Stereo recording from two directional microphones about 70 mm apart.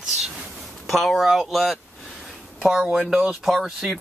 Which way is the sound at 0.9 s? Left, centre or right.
Centre.